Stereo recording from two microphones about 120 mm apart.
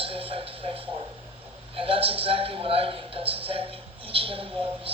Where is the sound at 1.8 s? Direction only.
50° right (ahead or behind).